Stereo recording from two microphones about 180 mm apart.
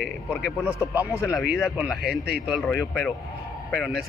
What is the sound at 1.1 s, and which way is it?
Speech, 15° left (ahead or behind).